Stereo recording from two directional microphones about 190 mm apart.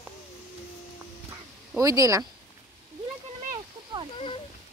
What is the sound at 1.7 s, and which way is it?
Speech, 15° right (ahead or behind).